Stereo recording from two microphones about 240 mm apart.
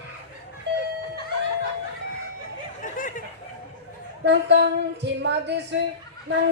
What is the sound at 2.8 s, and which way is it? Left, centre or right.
Snicker, left.